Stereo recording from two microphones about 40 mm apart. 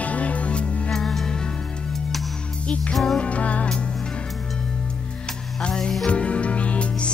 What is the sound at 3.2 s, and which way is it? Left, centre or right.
Music, left.